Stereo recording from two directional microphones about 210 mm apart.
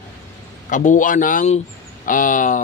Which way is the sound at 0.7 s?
35° left (ahead or behind).